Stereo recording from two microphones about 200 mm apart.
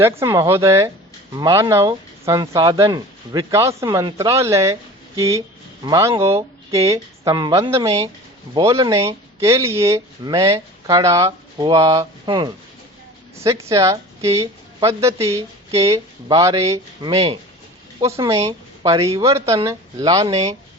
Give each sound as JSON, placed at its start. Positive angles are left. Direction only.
{"t": 0.0, "sound": "speech", "side_deg": -15}